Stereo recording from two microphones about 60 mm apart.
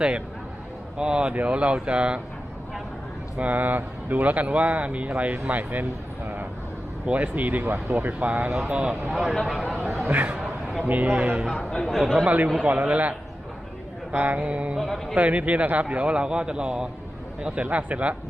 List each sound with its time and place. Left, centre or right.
0.9 s speech: centre
3.4 s speech: right
6.2 s vehicle: right
7.0 s speech: right
9.1 s speech: centre
10.1 s speech: right
11.4 s speech: centre
12.2 s speech: right
14.8 s speech: centre
15.1 s speech: right